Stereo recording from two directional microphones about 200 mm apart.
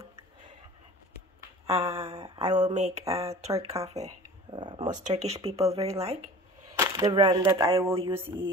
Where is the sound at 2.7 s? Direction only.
35° right (ahead or behind).